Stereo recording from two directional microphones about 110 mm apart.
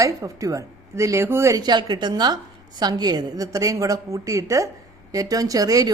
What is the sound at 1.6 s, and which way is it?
A woman's voice, 40° right (ahead or behind).